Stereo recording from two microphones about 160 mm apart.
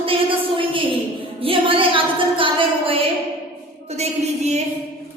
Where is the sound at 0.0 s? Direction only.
35° right (ahead or behind).